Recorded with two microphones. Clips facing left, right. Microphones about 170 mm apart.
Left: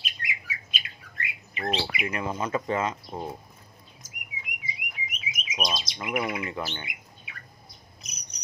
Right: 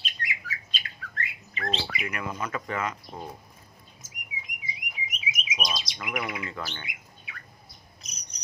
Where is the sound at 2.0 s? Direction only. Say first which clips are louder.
Left 3 dB; 25° left (ahead or behind).